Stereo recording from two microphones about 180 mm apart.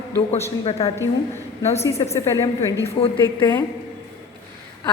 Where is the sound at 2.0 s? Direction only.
25° left (ahead or behind).